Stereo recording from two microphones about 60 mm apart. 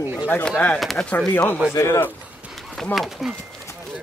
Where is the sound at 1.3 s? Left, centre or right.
Left.